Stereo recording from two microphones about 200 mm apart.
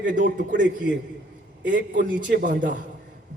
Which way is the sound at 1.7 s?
40° right (ahead or behind).